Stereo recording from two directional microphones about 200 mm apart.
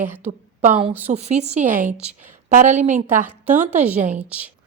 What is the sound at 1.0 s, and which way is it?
Speech, 30° right (ahead or behind).